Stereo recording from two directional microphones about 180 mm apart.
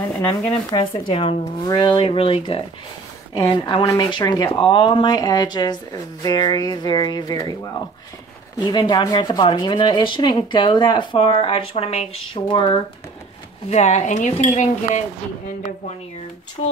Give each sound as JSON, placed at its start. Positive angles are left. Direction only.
{"t": 0.7, "sound": "speech", "side_deg": 25}
{"t": 8.5, "sound": "speech", "side_deg": 20}
{"t": 13.7, "sound": "speech", "side_deg": 40}